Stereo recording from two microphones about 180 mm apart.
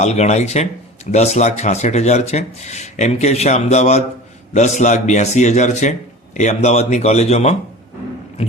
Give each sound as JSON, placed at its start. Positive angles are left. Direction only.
{"t": 0.0, "sound": "speech", "side_deg": 40}